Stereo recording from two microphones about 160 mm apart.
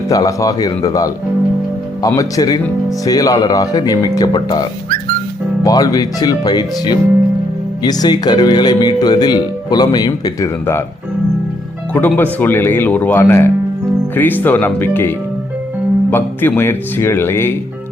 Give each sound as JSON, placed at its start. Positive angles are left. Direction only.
{"t": 0.1, "sound": "speech", "side_deg": 20}
{"t": 5.6, "sound": "speech", "side_deg": 20}
{"t": 11.9, "sound": "speech", "side_deg": 10}